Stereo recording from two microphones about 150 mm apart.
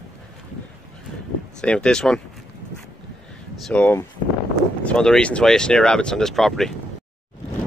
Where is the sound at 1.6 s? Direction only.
5° left (ahead or behind).